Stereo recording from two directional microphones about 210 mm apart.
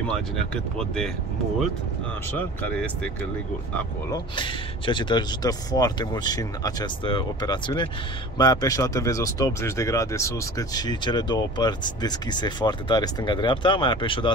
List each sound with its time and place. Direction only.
0.1 s speech: 5° left (ahead or behind)
2.3 s speech: 5° left (ahead or behind)
4.4 s speech: 20° left (ahead or behind)